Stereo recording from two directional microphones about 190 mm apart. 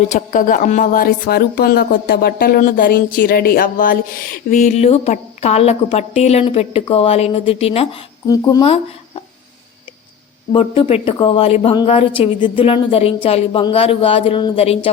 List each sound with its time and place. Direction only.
0.1 s speech: 45° left (ahead or behind)
10.5 s a woman's voice: 30° left (ahead or behind)